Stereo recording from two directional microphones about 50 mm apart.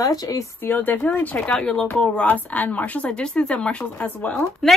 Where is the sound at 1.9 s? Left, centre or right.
Left.